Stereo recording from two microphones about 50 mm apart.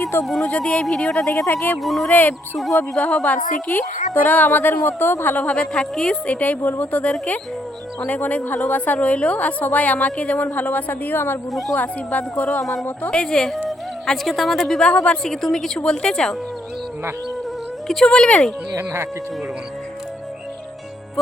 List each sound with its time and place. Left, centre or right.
0.0 s speech: left
0.4 s speech: left
1.8 s a woman's voice: centre
2.0 s speech: left
4.8 s speech: left
5.5 s a woman's voice: centre
6.2 s speech: left
11.7 s speech: left
13.1 s a woman's voice: centre
14.8 s speech: centre
15.3 s a woman's voice: centre
17.8 s a woman's voice: centre
18.8 s speech: right